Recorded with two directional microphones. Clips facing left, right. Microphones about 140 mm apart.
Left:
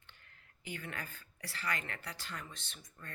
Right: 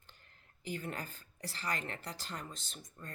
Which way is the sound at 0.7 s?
40° right (ahead or behind).